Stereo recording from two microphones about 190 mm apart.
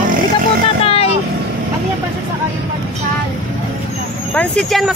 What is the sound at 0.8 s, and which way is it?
Vehicle, 30° left (ahead or behind).